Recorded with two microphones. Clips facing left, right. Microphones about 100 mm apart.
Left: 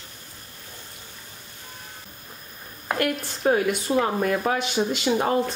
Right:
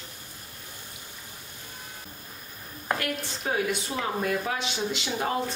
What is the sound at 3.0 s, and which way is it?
Speech, 50° left (ahead or behind).